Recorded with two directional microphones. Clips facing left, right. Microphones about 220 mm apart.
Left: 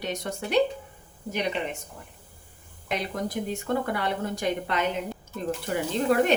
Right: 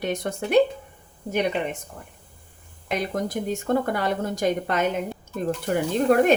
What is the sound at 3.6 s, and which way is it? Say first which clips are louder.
A woman's voice: right 5 dB; 45° right (ahead or behind).